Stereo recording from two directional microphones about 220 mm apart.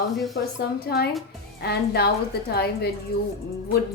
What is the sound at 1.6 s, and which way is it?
A woman's voice, 45° left (ahead or behind).